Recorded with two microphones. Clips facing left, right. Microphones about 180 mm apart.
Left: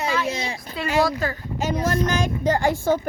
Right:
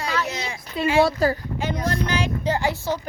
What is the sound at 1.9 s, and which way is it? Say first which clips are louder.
A woman's voice: left 2 dB; 45° left (ahead or behind).